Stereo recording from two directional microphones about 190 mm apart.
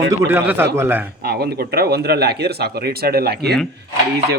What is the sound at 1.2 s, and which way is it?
Speech, 55° right (ahead or behind).